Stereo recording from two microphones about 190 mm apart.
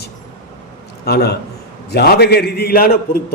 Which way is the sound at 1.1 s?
55° left (ahead or behind).